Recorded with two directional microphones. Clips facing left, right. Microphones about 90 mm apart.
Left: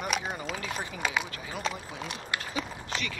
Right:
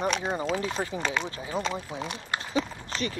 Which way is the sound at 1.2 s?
30° right (ahead or behind).